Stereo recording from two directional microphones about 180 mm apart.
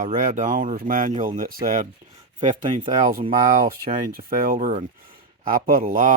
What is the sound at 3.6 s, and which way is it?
Speech, 55° right (ahead or behind).